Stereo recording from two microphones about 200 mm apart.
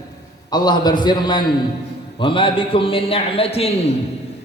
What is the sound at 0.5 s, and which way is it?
A man's voice, 20° left (ahead or behind).